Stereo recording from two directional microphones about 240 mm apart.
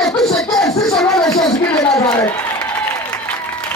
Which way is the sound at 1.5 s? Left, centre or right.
Centre.